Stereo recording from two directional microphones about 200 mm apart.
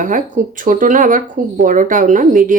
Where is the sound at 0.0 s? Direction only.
40° right (ahead or behind).